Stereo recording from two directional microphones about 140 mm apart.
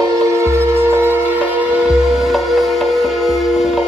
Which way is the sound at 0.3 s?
20° right (ahead or behind).